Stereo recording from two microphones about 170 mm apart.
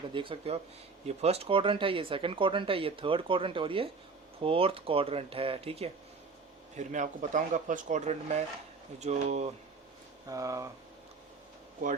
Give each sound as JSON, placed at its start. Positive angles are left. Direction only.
{"t": 0.1, "sound": "speech", "side_deg": -30}
{"t": 6.7, "sound": "speech", "side_deg": -45}
{"t": 10.2, "sound": "speech", "side_deg": -20}